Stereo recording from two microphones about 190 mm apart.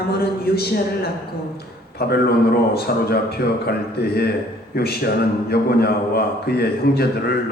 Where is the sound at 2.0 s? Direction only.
55° left (ahead or behind).